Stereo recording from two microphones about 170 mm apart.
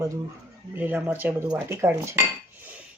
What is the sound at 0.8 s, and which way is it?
Speech, 10° right (ahead or behind).